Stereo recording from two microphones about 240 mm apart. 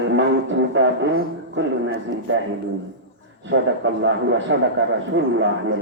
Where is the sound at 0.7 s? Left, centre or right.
Right.